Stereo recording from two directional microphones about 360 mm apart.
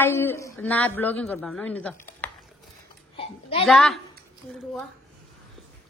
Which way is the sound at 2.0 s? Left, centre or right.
Centre.